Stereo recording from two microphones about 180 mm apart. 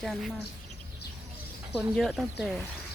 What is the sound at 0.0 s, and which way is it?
Speech, centre (ahead or behind).